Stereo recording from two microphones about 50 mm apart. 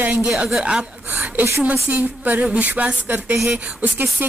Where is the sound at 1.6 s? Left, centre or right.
Right.